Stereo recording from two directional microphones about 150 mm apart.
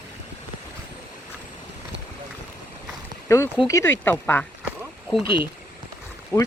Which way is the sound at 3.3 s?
20° left (ahead or behind).